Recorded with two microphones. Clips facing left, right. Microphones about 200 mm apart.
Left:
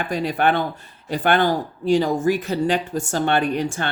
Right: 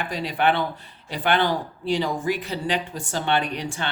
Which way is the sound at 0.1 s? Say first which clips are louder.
Left 3 dB; 45° left (ahead or behind).